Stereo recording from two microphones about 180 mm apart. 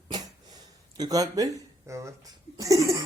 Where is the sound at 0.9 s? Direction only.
20° right (ahead or behind).